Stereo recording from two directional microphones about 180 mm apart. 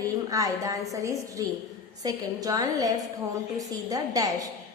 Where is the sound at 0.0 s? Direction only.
20° right (ahead or behind).